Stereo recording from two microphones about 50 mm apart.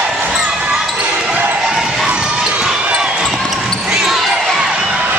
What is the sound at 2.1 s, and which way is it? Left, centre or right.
Basketball bounce, centre.